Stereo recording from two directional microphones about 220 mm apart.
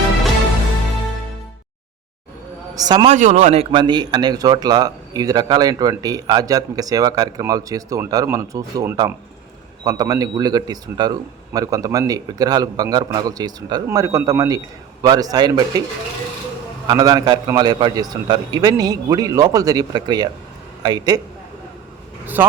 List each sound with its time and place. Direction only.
2.7 s a man's voice: 20° right (ahead or behind)
3.2 s speech: 35° right (ahead or behind); by 15.8 s 15° right (ahead or behind)
16.8 s speech: 15° right (ahead or behind)